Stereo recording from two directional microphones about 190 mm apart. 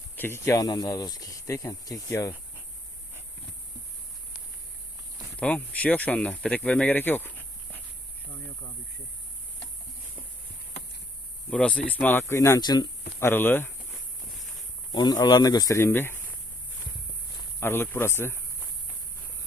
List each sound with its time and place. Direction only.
0.2 s speech: 15° left (ahead or behind)
5.4 s speech: 5° left (ahead or behind)
11.5 s speech: 5° left (ahead or behind)
14.9 s speech: 20° left (ahead or behind)
17.6 s speech: 10° left (ahead or behind)